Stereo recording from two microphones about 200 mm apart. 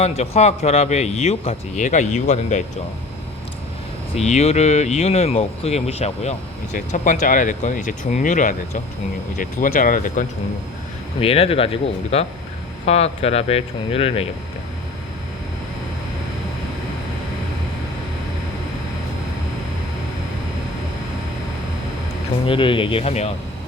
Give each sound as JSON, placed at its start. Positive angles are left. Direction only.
{"t": 0.0, "sound": "speech", "side_deg": 35}
{"t": 4.1, "sound": "speech", "side_deg": 35}
{"t": 11.2, "sound": "speech", "side_deg": 30}
{"t": 22.4, "sound": "speech", "side_deg": 25}